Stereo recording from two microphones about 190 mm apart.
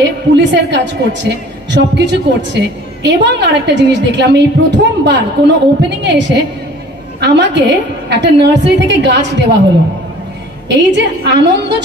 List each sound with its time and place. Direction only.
0.0 s a woman's voice: 70° right (ahead or behind)
10.7 s a woman's voice: 65° right (ahead or behind)